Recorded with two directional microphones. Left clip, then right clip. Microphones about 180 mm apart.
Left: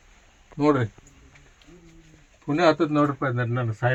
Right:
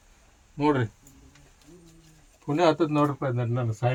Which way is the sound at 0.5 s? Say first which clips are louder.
Left 3 dB; 25° left (ahead or behind).